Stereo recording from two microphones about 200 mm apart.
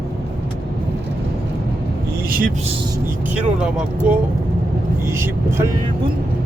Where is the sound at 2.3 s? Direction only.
45° right (ahead or behind).